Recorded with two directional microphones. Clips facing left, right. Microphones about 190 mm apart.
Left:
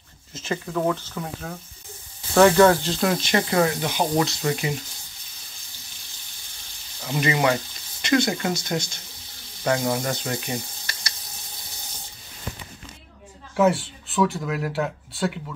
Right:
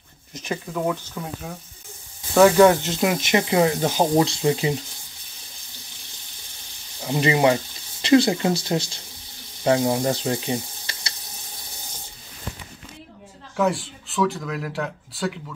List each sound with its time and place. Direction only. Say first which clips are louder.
0.3 s speech: left 1 dB; 15° right (ahead or behind)
7.0 s speech: right 3 dB; 20° right (ahead or behind)
13.6 s speech: left 3 dB; centre (ahead or behind)